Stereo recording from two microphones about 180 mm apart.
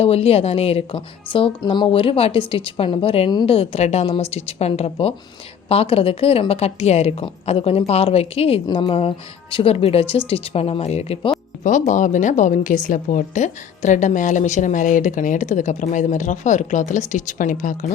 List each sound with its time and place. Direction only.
0.0 s a woman's voice: 35° left (ahead or behind)